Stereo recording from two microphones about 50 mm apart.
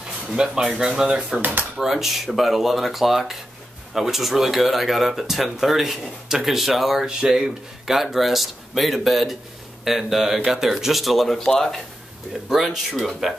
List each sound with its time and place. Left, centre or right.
0.3 s speech: centre
1.4 s speech: right
1.8 s speech: centre